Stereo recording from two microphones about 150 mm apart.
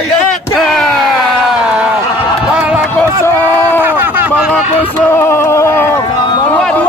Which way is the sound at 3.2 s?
15° left (ahead or behind).